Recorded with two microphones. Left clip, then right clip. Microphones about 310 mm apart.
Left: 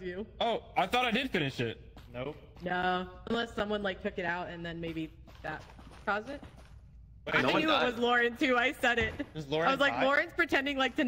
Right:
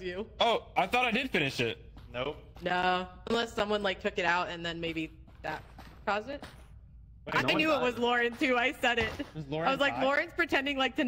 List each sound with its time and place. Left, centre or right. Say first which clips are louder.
0.0 s a man's voice: right 4 dB; centre
0.7 s speech: right 1 dB; centre
1.4 s a man's voice: right 4 dB; centre
7.6 s speech: even; centre
9.4 s speech: left 4 dB; centre
9.7 s speech: even; centre